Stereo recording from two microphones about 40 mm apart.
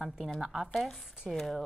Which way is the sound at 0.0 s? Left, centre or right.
Centre.